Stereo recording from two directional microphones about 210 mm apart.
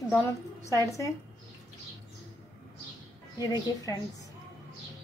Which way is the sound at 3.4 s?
20° left (ahead or behind).